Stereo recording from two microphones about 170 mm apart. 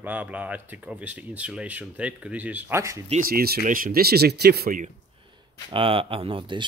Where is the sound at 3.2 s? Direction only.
65° right (ahead or behind).